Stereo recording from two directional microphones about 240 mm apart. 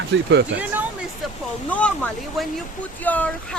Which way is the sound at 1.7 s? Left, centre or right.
Centre.